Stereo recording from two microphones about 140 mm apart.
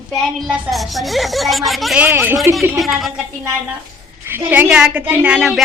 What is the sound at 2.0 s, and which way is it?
Speech, 10° right (ahead or behind).